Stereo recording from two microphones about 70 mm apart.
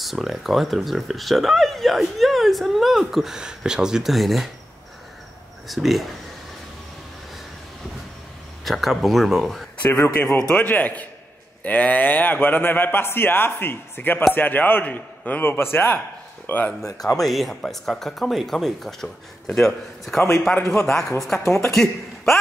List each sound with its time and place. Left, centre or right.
0.0 s speech: centre
5.7 s speech: centre
8.6 s speech: centre
9.8 s a man's voice: left
17.2 s speech: centre
21.3 s speech: left
21.6 s speech: centre